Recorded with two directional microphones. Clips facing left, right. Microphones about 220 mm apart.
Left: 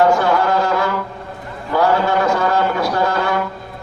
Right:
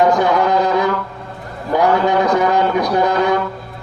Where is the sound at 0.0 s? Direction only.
20° right (ahead or behind).